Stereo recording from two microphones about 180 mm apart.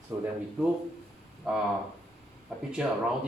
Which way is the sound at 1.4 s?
Centre (ahead or behind).